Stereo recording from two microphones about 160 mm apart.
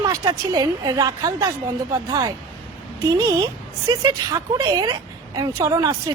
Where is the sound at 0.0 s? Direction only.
25° right (ahead or behind).